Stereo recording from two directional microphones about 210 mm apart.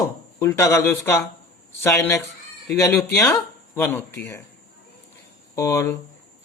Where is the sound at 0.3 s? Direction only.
10° left (ahead or behind).